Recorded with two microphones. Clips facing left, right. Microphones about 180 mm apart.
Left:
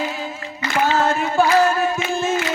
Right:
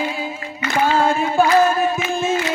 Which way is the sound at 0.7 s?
10° right (ahead or behind).